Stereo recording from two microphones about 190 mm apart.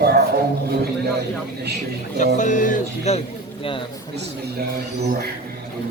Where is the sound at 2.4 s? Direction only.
40° left (ahead or behind).